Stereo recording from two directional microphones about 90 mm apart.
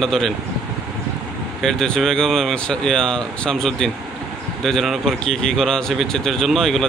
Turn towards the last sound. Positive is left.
turn(degrees=5)  # may be behind; listen again after turning